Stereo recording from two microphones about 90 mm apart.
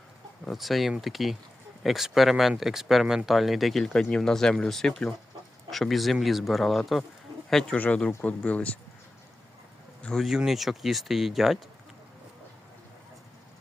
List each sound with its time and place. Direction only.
0.4 s speech: centre (ahead or behind)
7.8 s speech: 15° left (ahead or behind)
10.0 s speech: 10° left (ahead or behind)
10.2 s speech: 5° right (ahead or behind)